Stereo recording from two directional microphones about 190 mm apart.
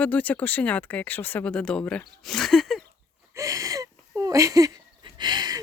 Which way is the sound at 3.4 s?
15° right (ahead or behind).